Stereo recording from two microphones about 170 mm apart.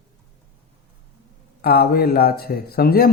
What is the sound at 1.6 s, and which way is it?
Speech, 60° left (ahead or behind).